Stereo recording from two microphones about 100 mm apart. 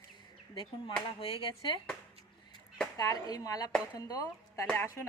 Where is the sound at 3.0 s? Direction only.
35° left (ahead or behind).